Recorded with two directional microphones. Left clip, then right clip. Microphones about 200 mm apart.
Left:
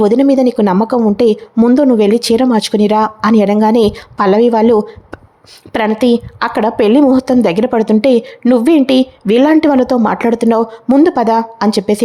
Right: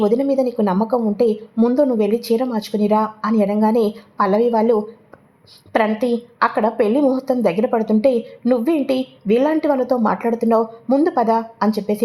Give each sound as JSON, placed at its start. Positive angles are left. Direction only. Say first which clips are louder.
{"t": 0.0, "sound": "a woman's voice", "louder": "left 7 dB", "side_deg": 35}